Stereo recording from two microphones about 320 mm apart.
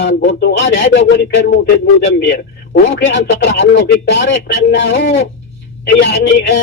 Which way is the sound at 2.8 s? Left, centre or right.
Left.